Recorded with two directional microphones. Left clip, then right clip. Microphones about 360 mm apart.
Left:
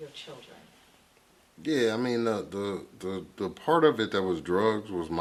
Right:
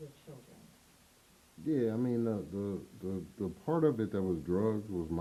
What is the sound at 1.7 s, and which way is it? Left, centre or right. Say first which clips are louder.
Speech: left 6 dB; centre.